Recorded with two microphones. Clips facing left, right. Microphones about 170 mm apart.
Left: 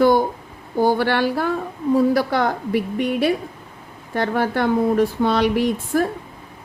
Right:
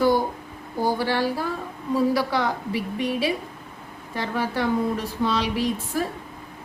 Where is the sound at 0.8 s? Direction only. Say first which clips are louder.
Left 5 dB; 65° left (ahead or behind).